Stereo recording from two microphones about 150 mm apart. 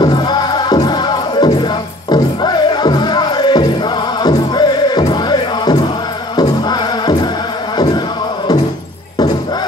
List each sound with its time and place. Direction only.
0.0 s music: 25° left (ahead or behind)